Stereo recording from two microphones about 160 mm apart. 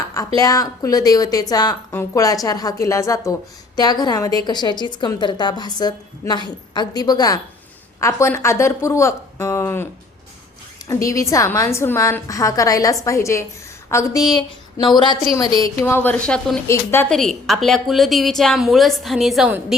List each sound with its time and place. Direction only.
0.3 s a woman's voice: 20° left (ahead or behind)
15.8 s a woman's voice: 10° left (ahead or behind)
17.1 s a woman's voice: centre (ahead or behind)